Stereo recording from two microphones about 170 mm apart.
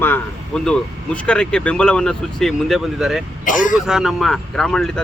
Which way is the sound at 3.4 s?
50° left (ahead or behind).